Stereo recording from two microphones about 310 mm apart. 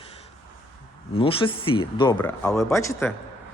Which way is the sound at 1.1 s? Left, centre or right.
Centre.